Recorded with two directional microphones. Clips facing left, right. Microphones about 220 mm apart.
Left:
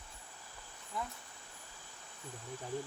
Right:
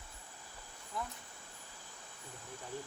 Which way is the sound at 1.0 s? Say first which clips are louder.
Left 1 dB; centre (ahead or behind).